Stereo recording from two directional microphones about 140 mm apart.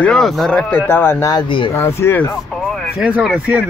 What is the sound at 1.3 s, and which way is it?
Speech, 35° left (ahead or behind).